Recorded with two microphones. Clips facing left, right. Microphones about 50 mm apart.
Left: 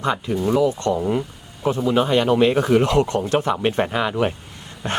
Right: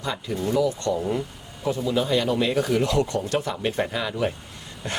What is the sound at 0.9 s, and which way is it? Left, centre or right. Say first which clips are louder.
Speech: left 4 dB; centre.